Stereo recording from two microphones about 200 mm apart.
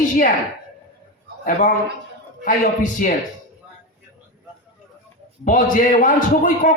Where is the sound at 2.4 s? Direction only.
40° left (ahead or behind).